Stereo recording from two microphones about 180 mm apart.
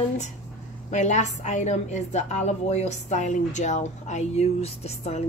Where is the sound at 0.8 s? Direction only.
40° left (ahead or behind).